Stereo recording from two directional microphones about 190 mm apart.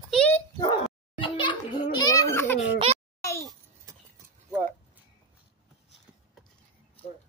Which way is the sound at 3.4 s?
20° right (ahead or behind).